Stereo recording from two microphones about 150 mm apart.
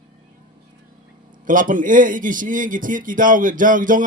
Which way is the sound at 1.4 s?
60° right (ahead or behind).